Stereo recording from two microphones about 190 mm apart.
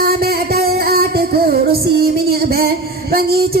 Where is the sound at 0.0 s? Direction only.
55° right (ahead or behind).